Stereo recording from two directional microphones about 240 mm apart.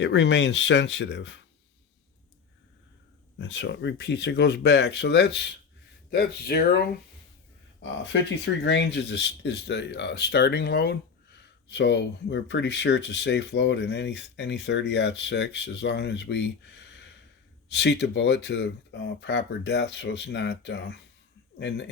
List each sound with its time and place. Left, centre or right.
0.0 s speech: left
3.3 s speech: left